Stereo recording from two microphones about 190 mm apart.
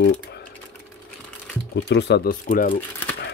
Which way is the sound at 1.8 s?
65° left (ahead or behind).